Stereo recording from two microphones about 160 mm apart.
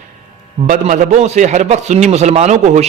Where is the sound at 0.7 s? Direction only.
50° right (ahead or behind).